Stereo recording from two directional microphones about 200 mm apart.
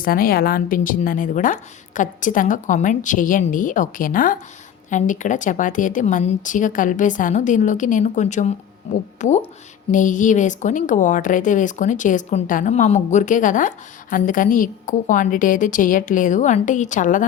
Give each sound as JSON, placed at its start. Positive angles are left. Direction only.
{"t": 0.0, "sound": "a woman's voice", "side_deg": 45}